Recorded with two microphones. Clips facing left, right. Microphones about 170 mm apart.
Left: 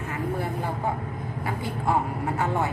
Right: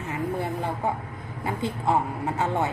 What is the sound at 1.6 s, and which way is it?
Speech, 20° right (ahead or behind).